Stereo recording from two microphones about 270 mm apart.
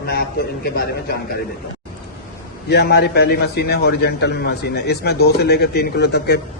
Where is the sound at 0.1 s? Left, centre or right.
Left.